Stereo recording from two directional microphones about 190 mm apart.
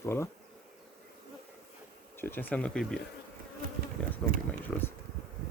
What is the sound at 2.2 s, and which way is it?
Speech, 10° left (ahead or behind).